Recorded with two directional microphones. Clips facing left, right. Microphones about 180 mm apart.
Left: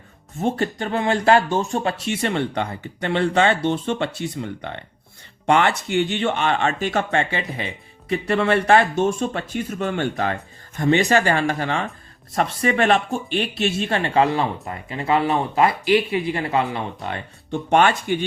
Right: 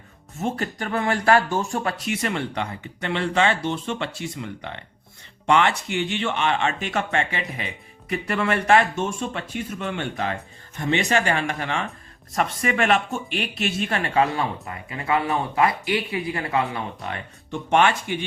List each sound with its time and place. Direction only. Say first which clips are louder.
0.4 s speech: left 4 dB; 30° left (ahead or behind)